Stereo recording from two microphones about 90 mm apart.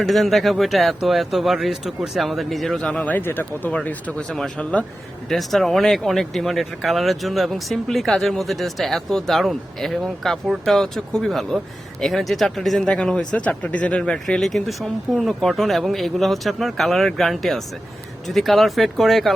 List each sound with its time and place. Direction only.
0.0 s speech: centre (ahead or behind)
3.0 s speech: 20° left (ahead or behind); by 19.3 s centre (ahead or behind)